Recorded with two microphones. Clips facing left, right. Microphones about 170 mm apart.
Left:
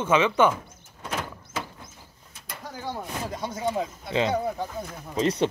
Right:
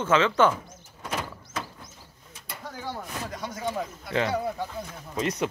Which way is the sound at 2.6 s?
10° left (ahead or behind).